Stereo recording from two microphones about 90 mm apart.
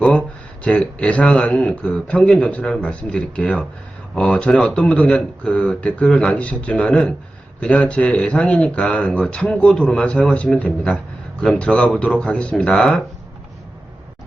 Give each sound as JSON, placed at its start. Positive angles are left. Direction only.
{"t": 0.0, "sound": "speech", "side_deg": 10}